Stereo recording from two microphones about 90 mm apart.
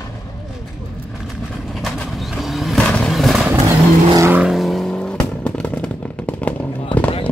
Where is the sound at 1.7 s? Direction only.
Centre (ahead or behind).